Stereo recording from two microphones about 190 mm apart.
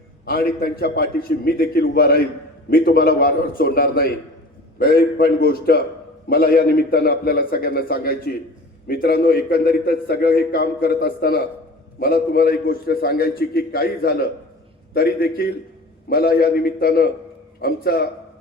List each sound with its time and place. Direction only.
0.6 s a man's voice: 55° left (ahead or behind)